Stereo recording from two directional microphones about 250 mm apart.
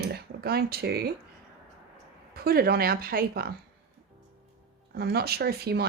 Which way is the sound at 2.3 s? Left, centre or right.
Right.